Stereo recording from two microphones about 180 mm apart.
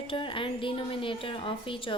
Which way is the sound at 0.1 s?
30° left (ahead or behind).